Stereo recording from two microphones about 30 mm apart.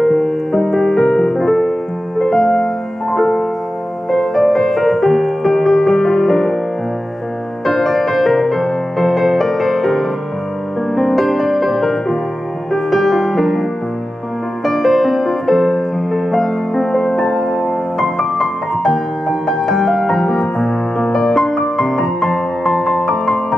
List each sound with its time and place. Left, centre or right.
0.0 s music: centre
7.6 s music: centre
21.4 s music: centre